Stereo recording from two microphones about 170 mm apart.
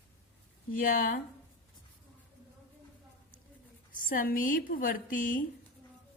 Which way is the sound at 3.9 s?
55° left (ahead or behind).